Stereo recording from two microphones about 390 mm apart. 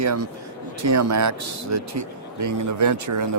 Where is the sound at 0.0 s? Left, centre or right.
Right.